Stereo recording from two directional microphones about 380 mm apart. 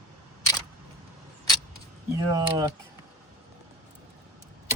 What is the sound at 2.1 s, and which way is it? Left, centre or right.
Speech, centre.